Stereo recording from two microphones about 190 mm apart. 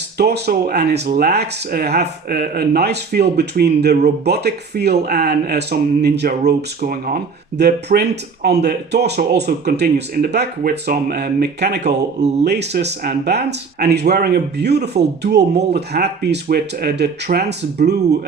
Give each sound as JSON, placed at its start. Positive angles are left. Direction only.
{"t": 0.2, "sound": "speech", "side_deg": -60}
{"t": 7.6, "sound": "speech", "side_deg": -60}